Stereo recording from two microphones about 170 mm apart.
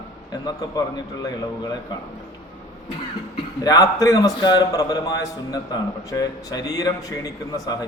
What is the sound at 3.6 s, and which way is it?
A man's voice, 20° left (ahead or behind).